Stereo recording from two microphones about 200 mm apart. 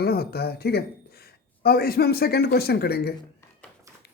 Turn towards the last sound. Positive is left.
turn(degrees=55)  # may be behind; listen again after turning